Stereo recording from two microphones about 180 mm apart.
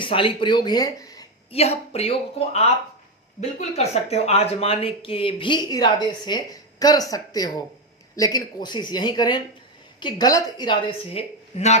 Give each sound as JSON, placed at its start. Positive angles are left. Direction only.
{"t": 0.0, "sound": "speech", "side_deg": 30}
{"t": 1.5, "sound": "speech", "side_deg": 35}